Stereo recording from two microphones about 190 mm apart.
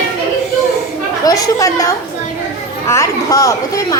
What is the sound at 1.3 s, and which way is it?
Speech, 20° left (ahead or behind).